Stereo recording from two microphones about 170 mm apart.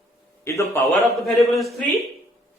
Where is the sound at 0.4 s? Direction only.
15° left (ahead or behind).